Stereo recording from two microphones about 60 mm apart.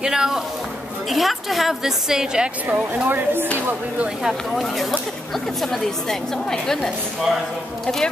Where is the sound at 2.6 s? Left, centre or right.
Right.